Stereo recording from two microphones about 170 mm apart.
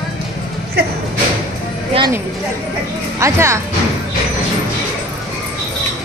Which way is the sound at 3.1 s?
15° right (ahead or behind).